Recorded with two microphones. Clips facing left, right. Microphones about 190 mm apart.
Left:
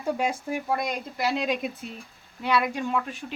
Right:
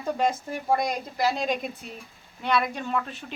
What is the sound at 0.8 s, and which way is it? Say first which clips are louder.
Speech: right 2 dB; 40° right (ahead or behind).